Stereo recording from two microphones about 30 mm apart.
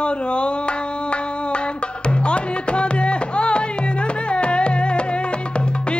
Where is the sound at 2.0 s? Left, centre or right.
Left.